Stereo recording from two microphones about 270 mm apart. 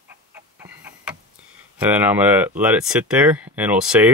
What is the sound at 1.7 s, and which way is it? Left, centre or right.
Speech, centre.